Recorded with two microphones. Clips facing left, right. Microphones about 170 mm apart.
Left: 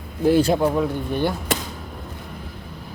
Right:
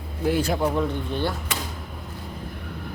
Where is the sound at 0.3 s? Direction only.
30° left (ahead or behind).